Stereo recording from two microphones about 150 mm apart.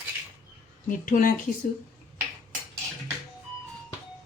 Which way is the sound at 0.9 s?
65° left (ahead or behind).